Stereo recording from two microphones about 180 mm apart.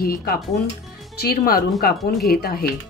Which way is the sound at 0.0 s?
55° left (ahead or behind).